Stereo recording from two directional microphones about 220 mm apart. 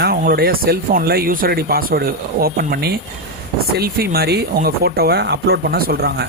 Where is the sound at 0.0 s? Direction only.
45° right (ahead or behind).